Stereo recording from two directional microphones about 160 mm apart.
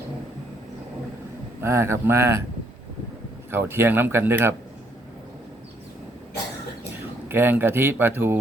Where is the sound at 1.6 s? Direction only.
15° right (ahead or behind).